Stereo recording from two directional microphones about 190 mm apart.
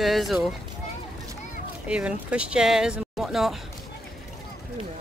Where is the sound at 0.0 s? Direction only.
Centre (ahead or behind).